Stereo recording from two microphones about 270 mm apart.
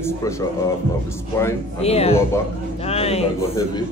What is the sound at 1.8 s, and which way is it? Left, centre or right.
Speech, left.